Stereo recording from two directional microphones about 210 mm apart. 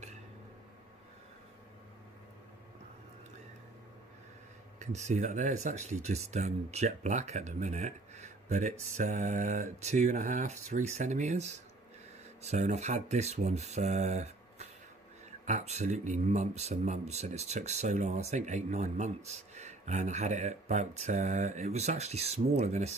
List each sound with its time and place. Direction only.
4.7 s speech: 35° right (ahead or behind)